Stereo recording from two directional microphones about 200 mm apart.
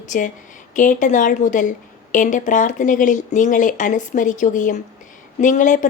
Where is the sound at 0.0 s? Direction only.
40° left (ahead or behind).